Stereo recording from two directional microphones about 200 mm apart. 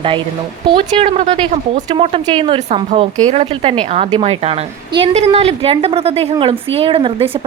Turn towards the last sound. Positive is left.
turn(degrees=-30)  # may be behind; listen again after turning